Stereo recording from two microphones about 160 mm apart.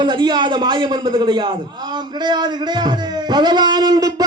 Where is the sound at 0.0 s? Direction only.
30° right (ahead or behind).